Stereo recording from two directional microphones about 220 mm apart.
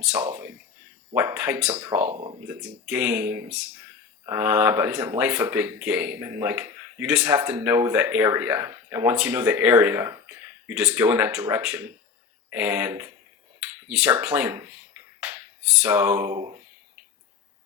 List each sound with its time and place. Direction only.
0.0 s speech: 5° right (ahead or behind)
2.0 s speech: 25° right (ahead or behind)
2.5 s speech: 5° right (ahead or behind)